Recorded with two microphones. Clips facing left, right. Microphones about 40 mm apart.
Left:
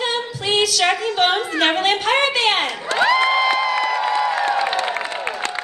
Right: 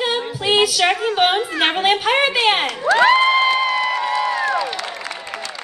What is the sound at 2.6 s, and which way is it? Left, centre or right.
Speech, right.